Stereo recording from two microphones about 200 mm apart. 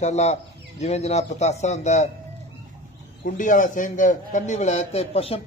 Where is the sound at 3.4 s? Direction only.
40° left (ahead or behind).